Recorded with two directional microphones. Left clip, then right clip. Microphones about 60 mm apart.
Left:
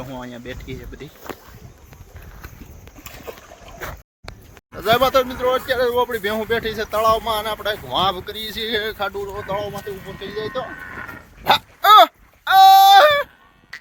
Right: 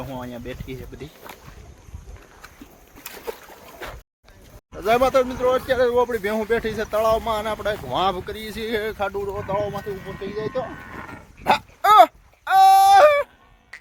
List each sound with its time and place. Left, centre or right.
0.0 s speech: centre
4.7 s speech: centre
9.5 s speech: centre
11.4 s a sound: centre